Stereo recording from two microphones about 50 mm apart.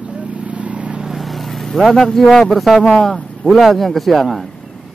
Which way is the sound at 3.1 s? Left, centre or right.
Left.